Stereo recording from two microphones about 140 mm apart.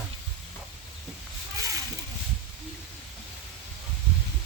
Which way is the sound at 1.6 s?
25° right (ahead or behind).